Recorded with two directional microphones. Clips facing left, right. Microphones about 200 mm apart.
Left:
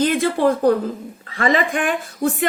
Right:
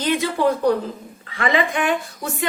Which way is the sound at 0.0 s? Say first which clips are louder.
Left 3 dB; 50° left (ahead or behind).